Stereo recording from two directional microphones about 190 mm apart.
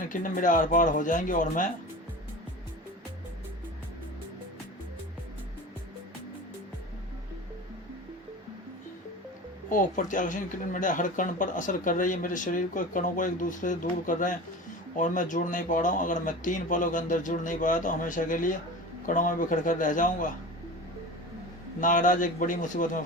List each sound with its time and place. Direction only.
0.0 s speech: 45° left (ahead or behind)
9.6 s speech: 45° left (ahead or behind)
21.8 s speech: 45° left (ahead or behind)